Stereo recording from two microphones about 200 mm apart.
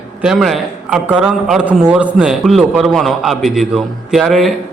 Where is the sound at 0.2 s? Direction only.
5° right (ahead or behind).